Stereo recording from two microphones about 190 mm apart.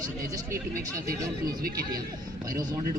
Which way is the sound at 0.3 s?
15° right (ahead or behind).